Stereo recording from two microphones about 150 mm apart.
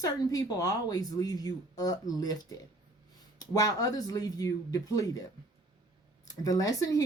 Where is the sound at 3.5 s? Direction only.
25° left (ahead or behind).